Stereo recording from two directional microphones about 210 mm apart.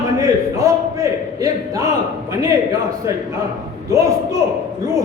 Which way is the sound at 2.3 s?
15° right (ahead or behind).